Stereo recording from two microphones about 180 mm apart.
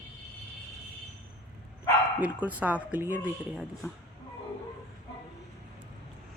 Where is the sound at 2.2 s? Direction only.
10° right (ahead or behind).